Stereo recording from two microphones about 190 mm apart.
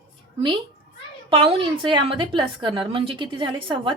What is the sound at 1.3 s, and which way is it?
A woman's voice, 25° right (ahead or behind).